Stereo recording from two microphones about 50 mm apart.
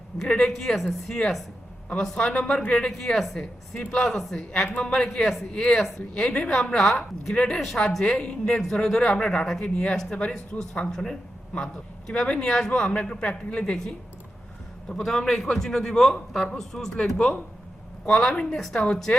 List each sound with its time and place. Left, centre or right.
0.2 s a man's voice: centre
2.9 s a man's voice: centre
5.5 s a man's voice: centre
6.7 s a woman's voice: centre
14.8 s a man's voice: centre